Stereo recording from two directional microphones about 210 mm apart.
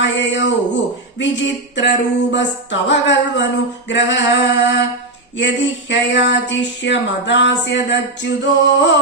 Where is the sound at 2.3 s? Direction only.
55° left (ahead or behind).